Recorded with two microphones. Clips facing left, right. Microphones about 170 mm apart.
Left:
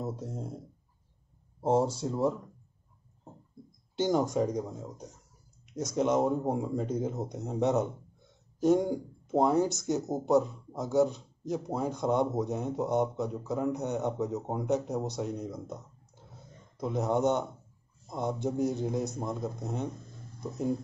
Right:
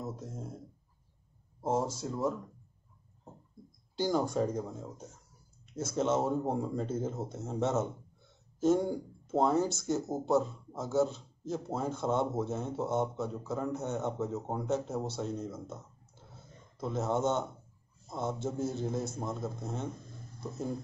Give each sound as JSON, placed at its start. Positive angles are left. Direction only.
{"t": 0.0, "sound": "speech", "side_deg": 30}
{"t": 1.6, "sound": "speech", "side_deg": 30}
{"t": 3.9, "sound": "a man's voice", "side_deg": 20}